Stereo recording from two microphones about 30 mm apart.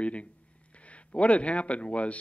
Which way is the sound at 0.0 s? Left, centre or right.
Left.